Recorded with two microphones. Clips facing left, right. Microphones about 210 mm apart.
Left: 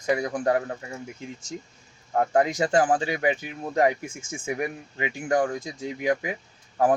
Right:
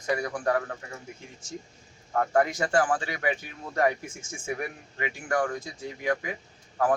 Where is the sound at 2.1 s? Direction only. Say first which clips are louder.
Left 2 dB; 20° left (ahead or behind).